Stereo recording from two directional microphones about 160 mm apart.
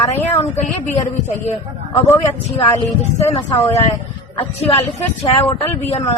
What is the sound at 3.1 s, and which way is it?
Speech, 40° left (ahead or behind).